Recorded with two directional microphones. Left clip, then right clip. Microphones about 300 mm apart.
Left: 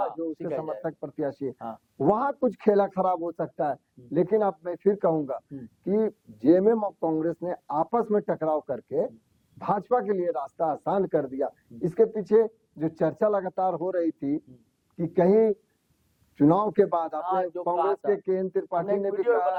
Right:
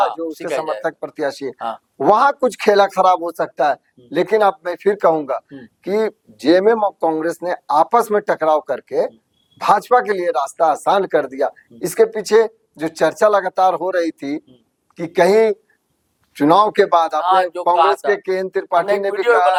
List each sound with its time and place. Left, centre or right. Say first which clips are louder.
0.0 s speech: right 11 dB; centre